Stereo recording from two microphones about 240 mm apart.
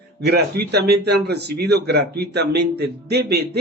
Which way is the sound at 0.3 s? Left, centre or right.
Right.